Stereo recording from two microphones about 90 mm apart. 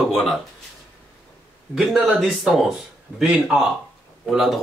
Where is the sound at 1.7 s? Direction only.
Centre (ahead or behind).